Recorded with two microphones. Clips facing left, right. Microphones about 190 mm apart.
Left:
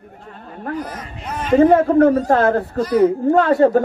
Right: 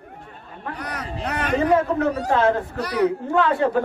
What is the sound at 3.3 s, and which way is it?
Speech, 40° left (ahead or behind).